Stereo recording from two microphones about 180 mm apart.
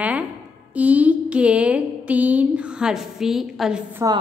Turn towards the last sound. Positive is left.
turn(degrees=-5)  # may be behind; listen again after turning